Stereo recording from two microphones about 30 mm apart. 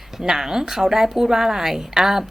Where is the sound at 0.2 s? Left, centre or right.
Centre.